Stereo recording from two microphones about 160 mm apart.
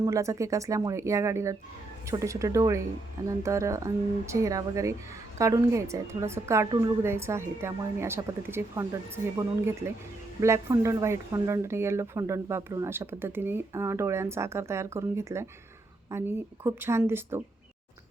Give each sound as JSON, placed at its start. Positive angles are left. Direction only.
{"t": 0.0, "sound": "speech", "side_deg": -20}
{"t": 10.4, "sound": "speech", "side_deg": -15}